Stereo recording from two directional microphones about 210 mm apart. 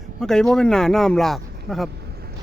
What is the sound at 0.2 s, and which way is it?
Speech, centre (ahead or behind).